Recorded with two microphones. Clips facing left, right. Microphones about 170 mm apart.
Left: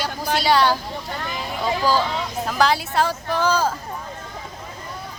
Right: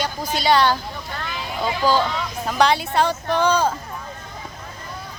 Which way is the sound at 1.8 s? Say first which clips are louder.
Right 3 dB; 5° left (ahead or behind).